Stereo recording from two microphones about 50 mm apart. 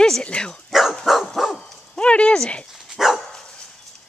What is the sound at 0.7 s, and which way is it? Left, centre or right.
Dog, centre.